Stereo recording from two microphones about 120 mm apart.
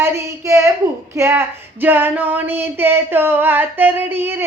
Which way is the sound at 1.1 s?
20° right (ahead or behind).